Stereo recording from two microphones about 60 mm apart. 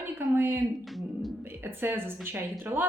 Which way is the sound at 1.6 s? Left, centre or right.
Right.